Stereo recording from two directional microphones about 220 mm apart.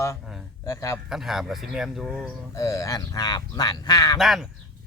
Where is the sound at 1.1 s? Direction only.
Centre (ahead or behind).